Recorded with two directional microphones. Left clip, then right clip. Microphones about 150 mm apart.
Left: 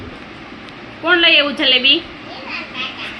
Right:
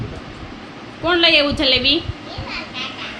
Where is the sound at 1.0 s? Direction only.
20° right (ahead or behind).